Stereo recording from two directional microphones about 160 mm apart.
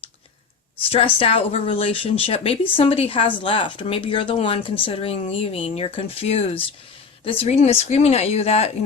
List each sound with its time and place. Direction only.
0.8 s speech: 35° left (ahead or behind)